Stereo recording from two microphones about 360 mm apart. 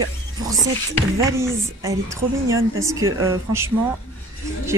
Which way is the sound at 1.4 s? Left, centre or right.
Centre.